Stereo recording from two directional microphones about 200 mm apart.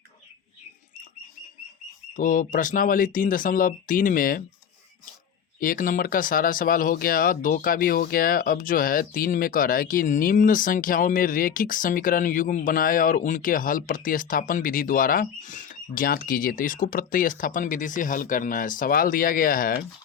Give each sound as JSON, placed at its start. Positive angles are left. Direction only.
{"t": 2.1, "sound": "speech", "side_deg": 40}
{"t": 5.5, "sound": "speech", "side_deg": 45}